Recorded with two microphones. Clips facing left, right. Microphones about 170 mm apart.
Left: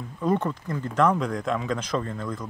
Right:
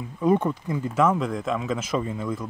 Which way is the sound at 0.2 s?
10° right (ahead or behind).